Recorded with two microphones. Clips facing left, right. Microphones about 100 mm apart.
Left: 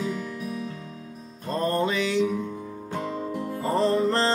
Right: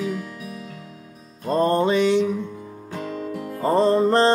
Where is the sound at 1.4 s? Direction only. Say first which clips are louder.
Right 6 dB; 30° right (ahead or behind).